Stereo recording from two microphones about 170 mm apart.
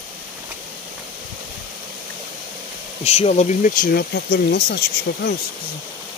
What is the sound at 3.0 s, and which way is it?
Speech, 40° left (ahead or behind).